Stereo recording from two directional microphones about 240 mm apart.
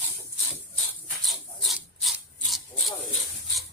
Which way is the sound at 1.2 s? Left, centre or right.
Centre.